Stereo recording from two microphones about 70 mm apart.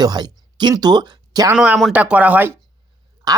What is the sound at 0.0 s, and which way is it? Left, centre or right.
Speech, right.